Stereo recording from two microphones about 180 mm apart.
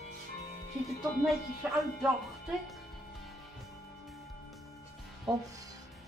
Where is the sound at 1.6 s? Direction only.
Centre (ahead or behind).